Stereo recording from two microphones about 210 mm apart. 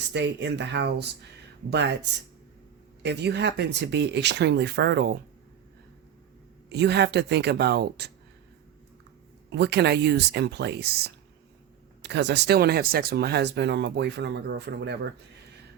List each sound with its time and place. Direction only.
0.1 s speech: 55° right (ahead or behind)
3.0 s speech: 55° right (ahead or behind)
6.7 s speech: 55° right (ahead or behind)
9.5 s speech: 55° right (ahead or behind)